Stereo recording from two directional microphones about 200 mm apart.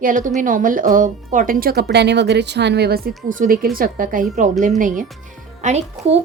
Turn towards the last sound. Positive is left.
turn(degrees=-35)  # may be behind; listen again after turning